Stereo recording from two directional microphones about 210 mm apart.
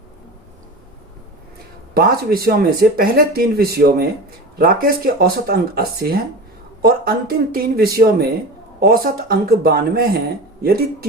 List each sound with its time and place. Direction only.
1.9 s speech: 45° right (ahead or behind)